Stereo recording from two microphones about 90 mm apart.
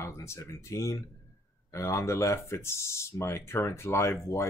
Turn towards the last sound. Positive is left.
turn(degrees=30)  # may be behind; listen again after turning